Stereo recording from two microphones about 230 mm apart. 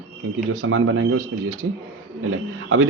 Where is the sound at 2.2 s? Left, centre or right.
Right.